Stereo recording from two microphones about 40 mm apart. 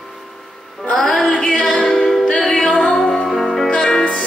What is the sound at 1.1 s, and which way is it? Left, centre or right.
Music, left.